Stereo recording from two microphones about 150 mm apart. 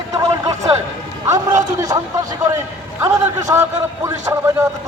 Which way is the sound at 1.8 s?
25° right (ahead or behind).